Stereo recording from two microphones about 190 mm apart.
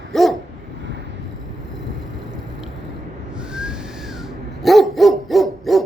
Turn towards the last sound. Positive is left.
turn(degrees=0)  # may be behind; listen again after turning